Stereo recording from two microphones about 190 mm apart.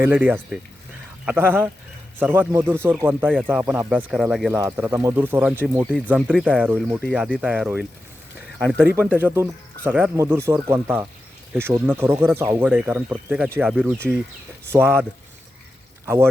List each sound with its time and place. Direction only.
0.0 s speech: 10° right (ahead or behind)
4.8 s speech: 15° right (ahead or behind)
9.1 s speech: 10° right (ahead or behind)
16.0 s speech: 15° right (ahead or behind)